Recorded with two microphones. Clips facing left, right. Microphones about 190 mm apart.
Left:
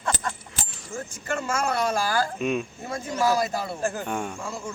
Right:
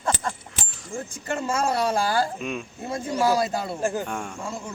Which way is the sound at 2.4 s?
Centre (ahead or behind).